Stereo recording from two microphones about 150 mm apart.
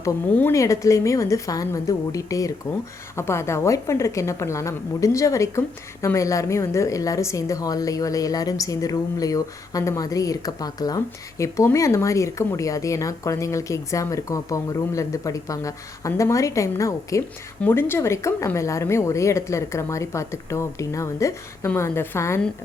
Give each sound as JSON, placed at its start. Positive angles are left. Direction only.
{"t": 0.0, "sound": "a woman's voice", "side_deg": 15}